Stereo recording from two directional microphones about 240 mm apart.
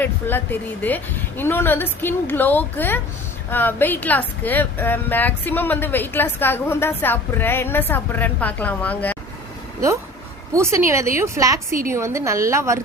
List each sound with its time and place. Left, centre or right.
0.0 s a woman's voice: centre
10.5 s a woman's voice: centre